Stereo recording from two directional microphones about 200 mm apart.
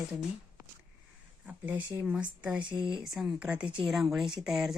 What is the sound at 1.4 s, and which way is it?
A woman's voice, 10° right (ahead or behind).